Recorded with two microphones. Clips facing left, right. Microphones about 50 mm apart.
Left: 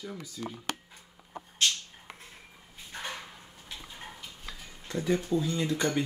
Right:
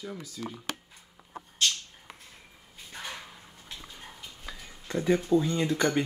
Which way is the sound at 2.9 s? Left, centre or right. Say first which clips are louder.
Left 1 dB; left.